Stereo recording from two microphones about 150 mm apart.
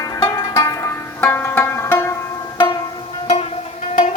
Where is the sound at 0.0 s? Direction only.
25° left (ahead or behind).